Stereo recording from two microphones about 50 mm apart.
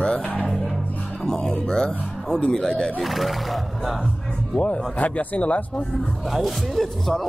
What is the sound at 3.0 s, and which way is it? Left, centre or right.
Speech, centre.